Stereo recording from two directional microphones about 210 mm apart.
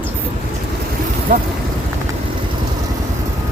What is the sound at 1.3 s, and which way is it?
Speech, 40° right (ahead or behind).